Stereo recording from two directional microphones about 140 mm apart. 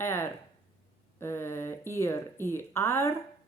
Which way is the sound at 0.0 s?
15° left (ahead or behind).